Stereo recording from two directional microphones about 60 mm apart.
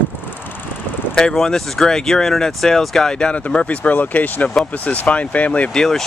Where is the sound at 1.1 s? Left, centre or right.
Centre.